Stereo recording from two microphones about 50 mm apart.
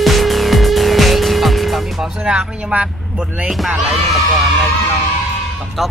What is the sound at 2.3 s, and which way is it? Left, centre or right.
Speech, right.